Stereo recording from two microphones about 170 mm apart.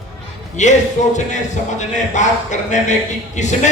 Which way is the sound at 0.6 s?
45° left (ahead or behind).